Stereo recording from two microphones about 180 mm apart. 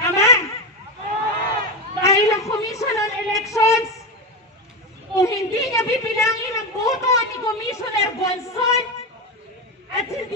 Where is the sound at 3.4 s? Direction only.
15° left (ahead or behind).